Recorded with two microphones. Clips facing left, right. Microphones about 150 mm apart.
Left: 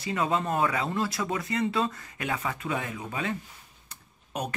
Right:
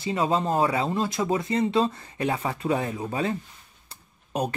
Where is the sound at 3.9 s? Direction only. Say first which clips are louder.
Right 6 dB; 30° right (ahead or behind).